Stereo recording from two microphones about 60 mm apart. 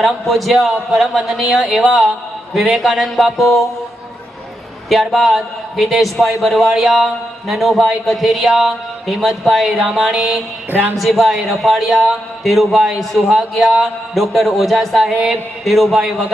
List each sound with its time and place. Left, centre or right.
0.0 s a man's voice: centre
4.8 s a man's voice: centre
10.7 s speech: right
11.0 s a man's voice: centre